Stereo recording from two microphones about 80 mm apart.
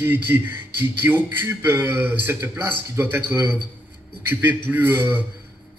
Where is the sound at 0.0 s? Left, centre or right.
Right.